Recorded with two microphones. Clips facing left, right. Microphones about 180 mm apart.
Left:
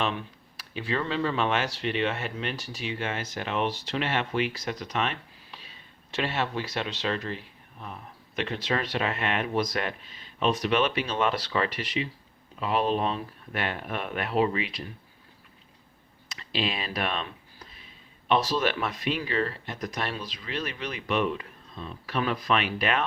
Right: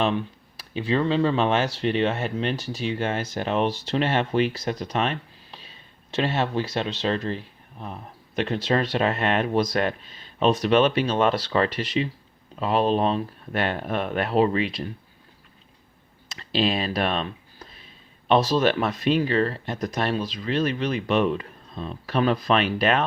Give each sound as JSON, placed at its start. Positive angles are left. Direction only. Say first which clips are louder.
{"t": 0.6, "sound": "speech", "louder": "right 7 dB", "side_deg": -25}
{"t": 16.3, "sound": "speech", "louder": "right 7 dB", "side_deg": -35}